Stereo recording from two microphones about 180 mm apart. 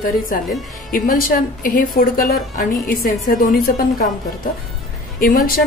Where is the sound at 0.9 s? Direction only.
50° left (ahead or behind).